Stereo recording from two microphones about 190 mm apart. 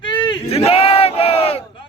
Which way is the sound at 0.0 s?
25° left (ahead or behind).